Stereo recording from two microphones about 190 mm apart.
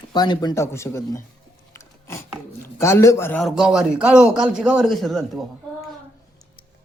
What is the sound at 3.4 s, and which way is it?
A man's voice, 5° right (ahead or behind).